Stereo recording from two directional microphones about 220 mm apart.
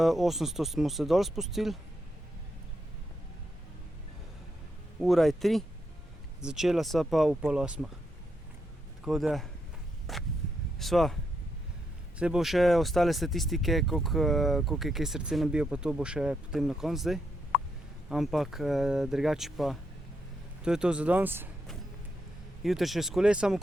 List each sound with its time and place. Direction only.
0.0 s speech: centre (ahead or behind)
4.9 s speech: centre (ahead or behind)
9.0 s speech: centre (ahead or behind)
12.2 s speech: centre (ahead or behind)
22.6 s speech: centre (ahead or behind)